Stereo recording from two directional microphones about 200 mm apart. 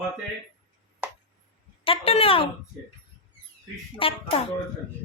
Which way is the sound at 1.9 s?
30° left (ahead or behind).